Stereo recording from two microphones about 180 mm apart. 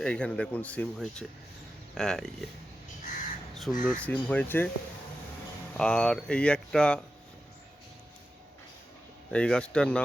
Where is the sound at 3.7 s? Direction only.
45° left (ahead or behind).